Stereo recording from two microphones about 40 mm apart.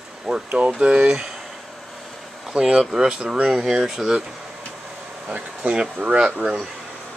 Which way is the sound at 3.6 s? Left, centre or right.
Centre.